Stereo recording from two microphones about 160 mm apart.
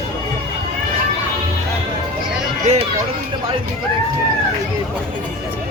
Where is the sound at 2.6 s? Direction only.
45° right (ahead or behind).